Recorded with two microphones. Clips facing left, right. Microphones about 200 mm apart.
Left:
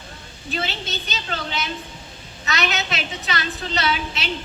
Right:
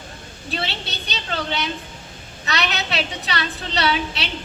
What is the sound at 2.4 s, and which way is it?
A woman's voice, 35° right (ahead or behind).